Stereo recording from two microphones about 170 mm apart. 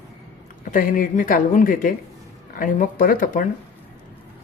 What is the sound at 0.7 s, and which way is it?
Speech, 55° left (ahead or behind).